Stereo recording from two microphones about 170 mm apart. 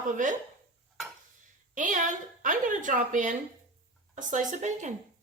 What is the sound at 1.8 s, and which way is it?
A woman's voice, 50° right (ahead or behind).